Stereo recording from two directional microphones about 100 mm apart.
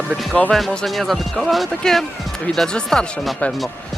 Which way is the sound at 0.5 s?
5° left (ahead or behind).